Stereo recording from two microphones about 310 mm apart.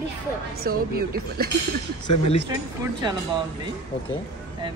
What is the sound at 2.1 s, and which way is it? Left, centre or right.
Speech, left.